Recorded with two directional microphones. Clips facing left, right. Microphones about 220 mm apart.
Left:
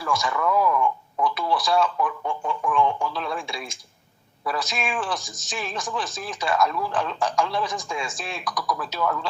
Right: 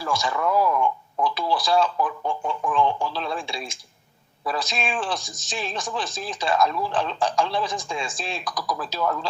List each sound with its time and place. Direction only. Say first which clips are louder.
0.0 s speech: even; 30° right (ahead or behind)